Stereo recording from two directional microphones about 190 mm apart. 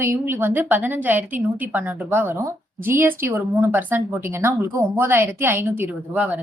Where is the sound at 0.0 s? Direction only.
10° right (ahead or behind).